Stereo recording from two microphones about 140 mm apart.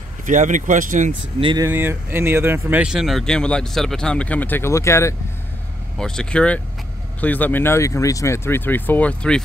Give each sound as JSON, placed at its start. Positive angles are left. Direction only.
{"t": 0.2, "sound": "speech", "side_deg": -65}
{"t": 1.4, "sound": "speech", "side_deg": -35}
{"t": 1.7, "sound": "speech", "side_deg": -15}
{"t": 5.9, "sound": "speech", "side_deg": 5}